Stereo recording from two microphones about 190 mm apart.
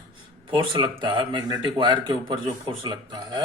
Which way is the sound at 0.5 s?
25° right (ahead or behind).